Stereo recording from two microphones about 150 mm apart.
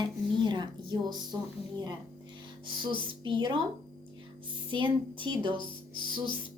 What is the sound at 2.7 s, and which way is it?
Speech, 35° right (ahead or behind).